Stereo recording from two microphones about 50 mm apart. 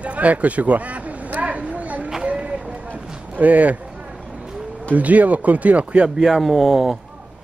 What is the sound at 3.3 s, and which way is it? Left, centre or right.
Speech, right.